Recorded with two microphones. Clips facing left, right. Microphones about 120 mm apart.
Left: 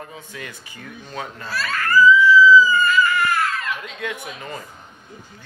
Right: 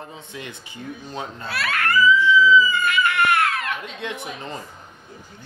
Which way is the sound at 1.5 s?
70° right (ahead or behind).